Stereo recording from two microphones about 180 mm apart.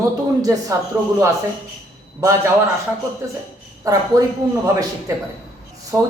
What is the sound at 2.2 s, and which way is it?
Speech, 15° right (ahead or behind).